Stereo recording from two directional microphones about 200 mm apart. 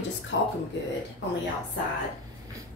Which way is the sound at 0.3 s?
65° left (ahead or behind).